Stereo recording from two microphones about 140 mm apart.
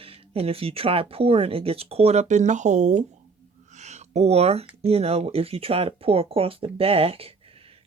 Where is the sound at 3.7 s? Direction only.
55° right (ahead or behind).